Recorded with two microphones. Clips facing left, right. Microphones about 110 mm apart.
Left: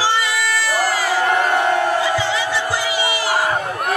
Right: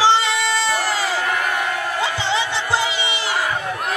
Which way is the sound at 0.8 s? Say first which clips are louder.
Left 4 dB; 30° left (ahead or behind).